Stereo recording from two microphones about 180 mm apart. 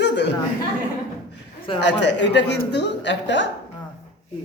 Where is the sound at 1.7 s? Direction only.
75° left (ahead or behind).